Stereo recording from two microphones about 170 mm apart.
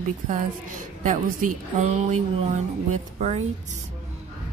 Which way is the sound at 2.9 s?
40° right (ahead or behind).